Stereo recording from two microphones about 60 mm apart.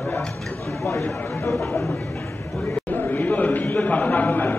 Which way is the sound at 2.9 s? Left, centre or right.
Left.